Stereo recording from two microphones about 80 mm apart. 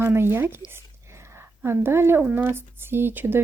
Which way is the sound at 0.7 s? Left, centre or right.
Right.